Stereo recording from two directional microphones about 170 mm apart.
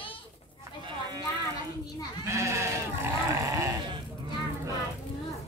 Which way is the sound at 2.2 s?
15° right (ahead or behind).